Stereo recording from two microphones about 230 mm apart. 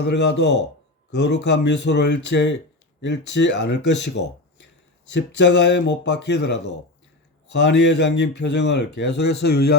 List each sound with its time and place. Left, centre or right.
0.1 s speech: left